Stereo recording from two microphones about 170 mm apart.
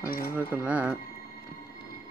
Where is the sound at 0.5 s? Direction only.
10° right (ahead or behind).